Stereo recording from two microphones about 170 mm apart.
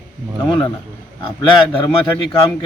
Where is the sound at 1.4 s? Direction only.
30° left (ahead or behind).